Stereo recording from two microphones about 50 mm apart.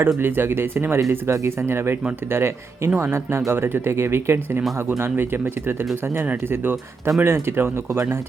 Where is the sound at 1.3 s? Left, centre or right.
Right.